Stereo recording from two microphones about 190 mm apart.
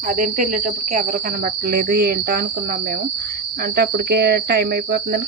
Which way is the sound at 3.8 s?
55° right (ahead or behind).